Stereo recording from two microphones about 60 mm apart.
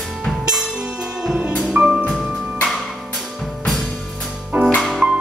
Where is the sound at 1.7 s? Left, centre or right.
Centre.